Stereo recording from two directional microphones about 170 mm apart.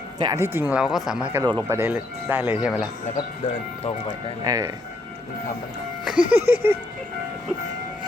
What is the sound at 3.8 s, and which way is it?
Speech, 35° left (ahead or behind).